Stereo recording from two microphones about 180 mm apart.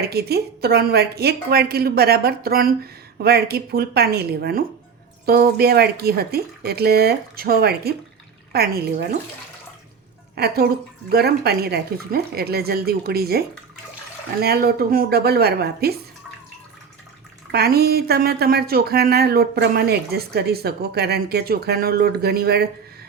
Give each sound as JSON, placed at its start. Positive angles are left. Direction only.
{"t": 0.1, "sound": "speech", "side_deg": -60}
{"t": 10.3, "sound": "speech", "side_deg": -60}
{"t": 14.4, "sound": "speech", "side_deg": -55}
{"t": 17.5, "sound": "speech", "side_deg": -60}